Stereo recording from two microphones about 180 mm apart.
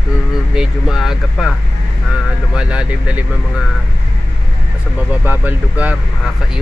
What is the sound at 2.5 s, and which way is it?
Speech, 5° right (ahead or behind).